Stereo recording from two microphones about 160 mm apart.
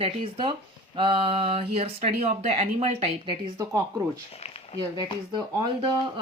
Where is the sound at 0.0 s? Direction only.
35° right (ahead or behind).